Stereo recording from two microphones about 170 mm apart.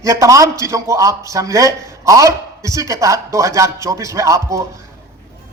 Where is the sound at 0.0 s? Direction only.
20° right (ahead or behind).